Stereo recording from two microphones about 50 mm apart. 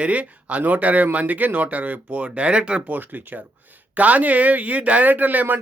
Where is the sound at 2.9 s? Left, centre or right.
Right.